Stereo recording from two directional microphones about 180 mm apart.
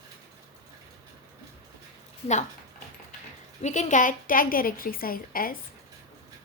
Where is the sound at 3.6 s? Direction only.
40° left (ahead or behind).